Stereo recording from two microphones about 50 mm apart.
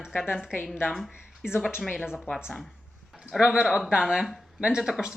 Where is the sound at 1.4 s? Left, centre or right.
Left.